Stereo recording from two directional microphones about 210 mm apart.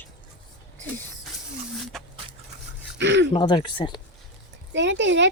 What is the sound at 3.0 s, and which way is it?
Speech, 60° right (ahead or behind).